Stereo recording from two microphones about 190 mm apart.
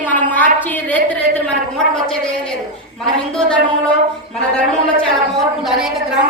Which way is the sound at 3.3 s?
5° left (ahead or behind).